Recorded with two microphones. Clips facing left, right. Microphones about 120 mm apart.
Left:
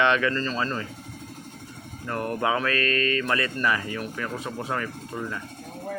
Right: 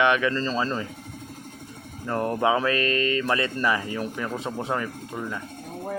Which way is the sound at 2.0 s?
25° right (ahead or behind).